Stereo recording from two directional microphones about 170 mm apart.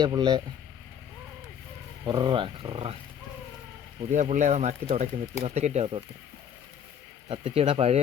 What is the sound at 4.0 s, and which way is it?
Speech, 45° right (ahead or behind).